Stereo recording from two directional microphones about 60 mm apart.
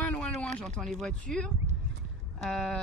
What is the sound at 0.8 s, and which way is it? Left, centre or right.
Speech, centre.